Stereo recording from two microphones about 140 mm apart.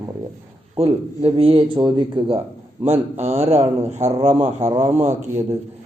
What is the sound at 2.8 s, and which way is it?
Speech, 55° right (ahead or behind).